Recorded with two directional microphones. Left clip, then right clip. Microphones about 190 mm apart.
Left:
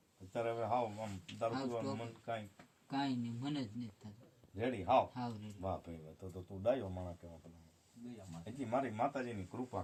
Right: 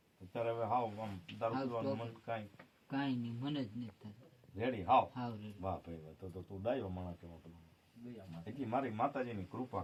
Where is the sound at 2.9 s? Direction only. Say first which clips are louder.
Left 1 dB; centre (ahead or behind).